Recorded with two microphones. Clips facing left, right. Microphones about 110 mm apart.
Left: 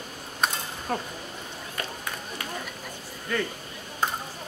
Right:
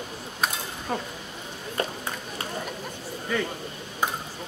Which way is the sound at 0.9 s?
Centre (ahead or behind).